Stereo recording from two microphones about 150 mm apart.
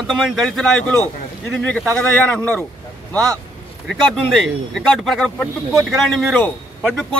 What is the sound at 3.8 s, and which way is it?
Speech, 5° left (ahead or behind).